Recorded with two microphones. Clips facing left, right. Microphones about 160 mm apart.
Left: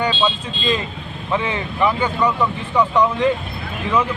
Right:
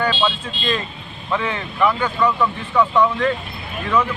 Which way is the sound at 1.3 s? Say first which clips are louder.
Left 1 dB; 20° left (ahead or behind).